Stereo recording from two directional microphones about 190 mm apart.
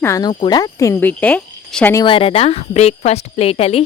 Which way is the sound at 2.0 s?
25° left (ahead or behind).